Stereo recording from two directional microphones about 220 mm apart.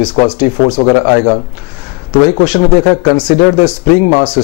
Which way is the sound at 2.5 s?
20° left (ahead or behind).